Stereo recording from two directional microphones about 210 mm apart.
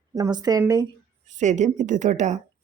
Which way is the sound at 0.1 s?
20° right (ahead or behind).